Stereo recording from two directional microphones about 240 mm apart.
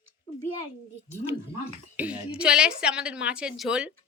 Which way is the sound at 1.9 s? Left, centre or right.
Centre.